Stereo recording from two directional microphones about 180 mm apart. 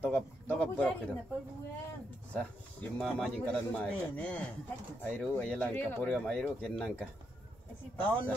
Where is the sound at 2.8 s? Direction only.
5° left (ahead or behind).